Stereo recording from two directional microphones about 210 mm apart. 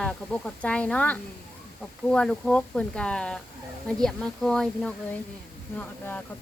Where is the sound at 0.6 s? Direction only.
5° left (ahead or behind).